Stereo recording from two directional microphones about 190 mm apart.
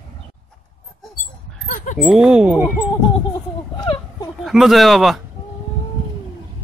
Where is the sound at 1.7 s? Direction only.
40° left (ahead or behind).